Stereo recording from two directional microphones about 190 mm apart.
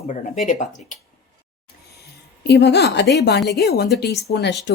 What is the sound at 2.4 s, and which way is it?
A woman's voice, 60° left (ahead or behind).